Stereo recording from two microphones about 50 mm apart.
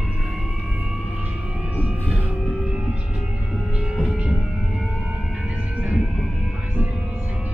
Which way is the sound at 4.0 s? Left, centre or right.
Centre.